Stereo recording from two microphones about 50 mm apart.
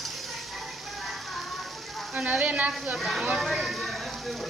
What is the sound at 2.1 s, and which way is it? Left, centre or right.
Speech, right.